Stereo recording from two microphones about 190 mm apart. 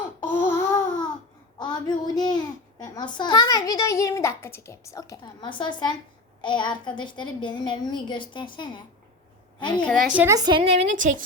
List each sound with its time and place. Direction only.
0.4 s babbling: 10° left (ahead or behind)
1.5 s a child's voice: 20° left (ahead or behind)
9.8 s a woman's voice: centre (ahead or behind)
10.3 s a woman's voice: 20° right (ahead or behind)
10.6 s a woman's voice: 35° right (ahead or behind)